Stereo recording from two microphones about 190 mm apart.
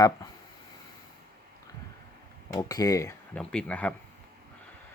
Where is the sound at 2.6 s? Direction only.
20° left (ahead or behind).